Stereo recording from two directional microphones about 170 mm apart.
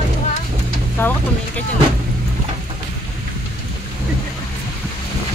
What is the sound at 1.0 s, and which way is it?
Speech, 10° left (ahead or behind).